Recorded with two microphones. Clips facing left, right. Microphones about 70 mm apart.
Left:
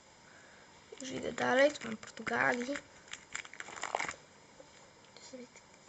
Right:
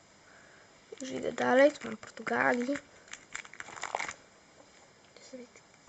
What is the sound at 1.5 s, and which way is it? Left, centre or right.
Speech, right.